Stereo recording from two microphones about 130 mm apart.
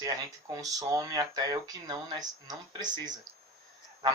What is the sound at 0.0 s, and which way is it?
Speech, 25° right (ahead or behind).